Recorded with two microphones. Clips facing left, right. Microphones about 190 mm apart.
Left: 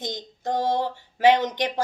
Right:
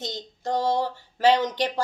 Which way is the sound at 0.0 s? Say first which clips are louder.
Left 1 dB; 15° left (ahead or behind).